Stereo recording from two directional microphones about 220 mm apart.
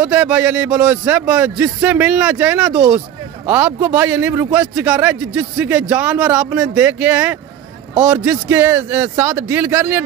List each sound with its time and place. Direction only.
0.0 s a man's voice: 5° right (ahead or behind)